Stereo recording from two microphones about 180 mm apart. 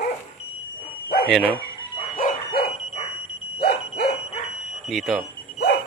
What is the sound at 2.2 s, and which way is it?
Dog, 45° left (ahead or behind).